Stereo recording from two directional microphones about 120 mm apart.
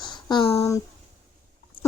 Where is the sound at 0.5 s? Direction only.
25° left (ahead or behind).